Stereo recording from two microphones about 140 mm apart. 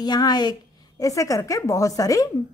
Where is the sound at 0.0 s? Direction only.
30° left (ahead or behind).